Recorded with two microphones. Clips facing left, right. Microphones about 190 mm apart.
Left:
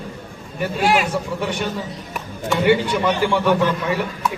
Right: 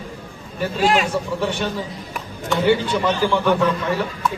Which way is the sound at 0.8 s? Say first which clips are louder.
Even; 5° left (ahead or behind).